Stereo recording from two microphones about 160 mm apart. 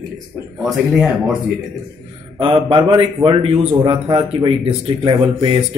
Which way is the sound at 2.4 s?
30° right (ahead or behind).